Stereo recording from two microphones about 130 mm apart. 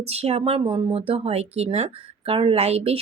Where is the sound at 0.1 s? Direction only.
55° right (ahead or behind).